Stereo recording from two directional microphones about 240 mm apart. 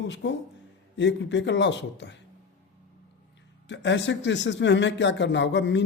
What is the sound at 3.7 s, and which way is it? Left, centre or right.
Speech, left.